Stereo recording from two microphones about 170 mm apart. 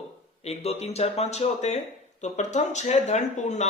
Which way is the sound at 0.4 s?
35° left (ahead or behind).